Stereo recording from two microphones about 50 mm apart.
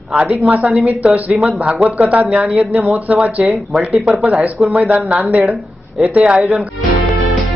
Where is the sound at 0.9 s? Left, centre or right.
Right.